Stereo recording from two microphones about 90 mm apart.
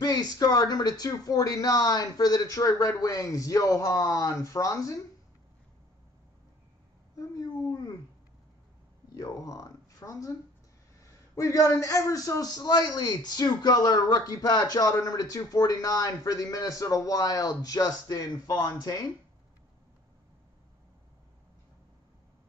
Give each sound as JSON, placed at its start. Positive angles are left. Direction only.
{"t": 0.0, "sound": "speech", "side_deg": 50}
{"t": 7.2, "sound": "a sound", "side_deg": 40}
{"t": 7.6, "sound": "speech", "side_deg": 50}
{"t": 9.1, "sound": "a man's voice", "side_deg": 45}